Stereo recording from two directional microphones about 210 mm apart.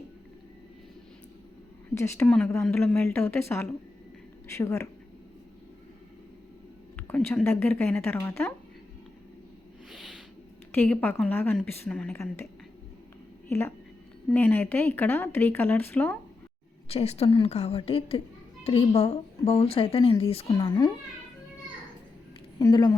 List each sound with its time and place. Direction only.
2.0 s speech: 10° left (ahead or behind)
6.9 s speech: 10° left (ahead or behind)
9.9 s a sound: centre (ahead or behind)
10.7 s speech: 10° left (ahead or behind)
13.5 s speech: 10° left (ahead or behind)
16.9 s a woman's voice: 30° left (ahead or behind)
22.5 s a woman's voice: 20° left (ahead or behind)